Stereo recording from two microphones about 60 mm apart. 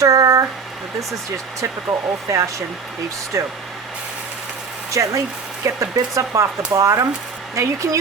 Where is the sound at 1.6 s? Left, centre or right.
Right.